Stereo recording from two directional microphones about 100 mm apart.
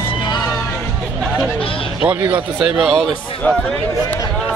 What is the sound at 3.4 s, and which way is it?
Speech, 20° left (ahead or behind).